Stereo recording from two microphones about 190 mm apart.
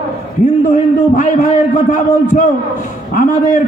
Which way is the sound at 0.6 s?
40° left (ahead or behind).